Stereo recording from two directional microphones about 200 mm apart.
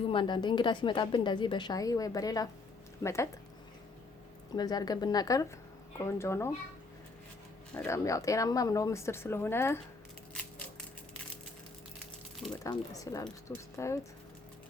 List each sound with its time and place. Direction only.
0.1 s a woman's voice: 25° left (ahead or behind)
4.5 s a woman's voice: 20° left (ahead or behind)
7.7 s speech: 10° left (ahead or behind)
12.6 s speech: 15° left (ahead or behind)